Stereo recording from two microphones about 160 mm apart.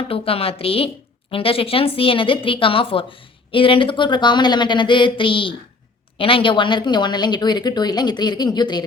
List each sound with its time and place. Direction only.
0.1 s a woman's voice: 35° left (ahead or behind)